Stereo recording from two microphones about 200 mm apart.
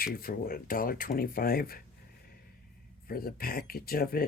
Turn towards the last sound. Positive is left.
turn(degrees=50)  # may be behind; listen again after turning